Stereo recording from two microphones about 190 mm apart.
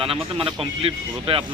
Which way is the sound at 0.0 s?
30° right (ahead or behind).